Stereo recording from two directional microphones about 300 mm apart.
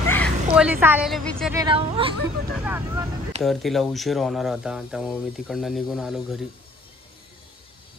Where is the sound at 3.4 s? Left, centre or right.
Centre.